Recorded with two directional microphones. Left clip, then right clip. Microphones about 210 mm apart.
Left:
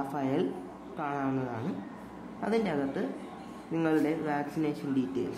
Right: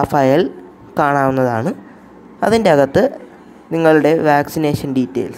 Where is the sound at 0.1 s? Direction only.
45° right (ahead or behind).